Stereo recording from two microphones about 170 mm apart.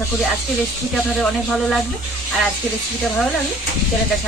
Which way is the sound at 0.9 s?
5° left (ahead or behind).